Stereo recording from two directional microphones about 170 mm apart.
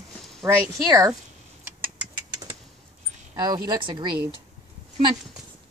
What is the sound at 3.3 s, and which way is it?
Speech, 20° right (ahead or behind).